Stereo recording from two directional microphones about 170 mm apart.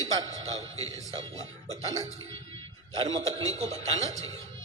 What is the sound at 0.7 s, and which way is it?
Speech, 20° left (ahead or behind).